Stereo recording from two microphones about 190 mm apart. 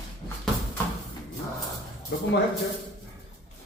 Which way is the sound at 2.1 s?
70° left (ahead or behind).